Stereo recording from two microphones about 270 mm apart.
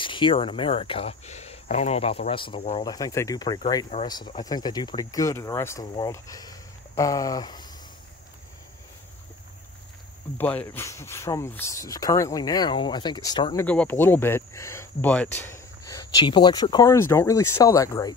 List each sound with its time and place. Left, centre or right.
0.0 s speech: centre
10.3 s speech: centre